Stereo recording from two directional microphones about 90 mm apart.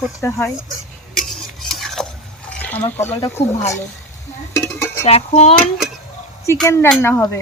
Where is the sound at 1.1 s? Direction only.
Centre (ahead or behind).